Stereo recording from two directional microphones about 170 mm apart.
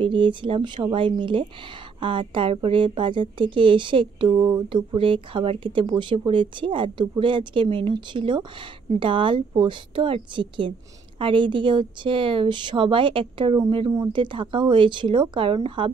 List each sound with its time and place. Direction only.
0.0 s a woman's voice: 30° right (ahead or behind)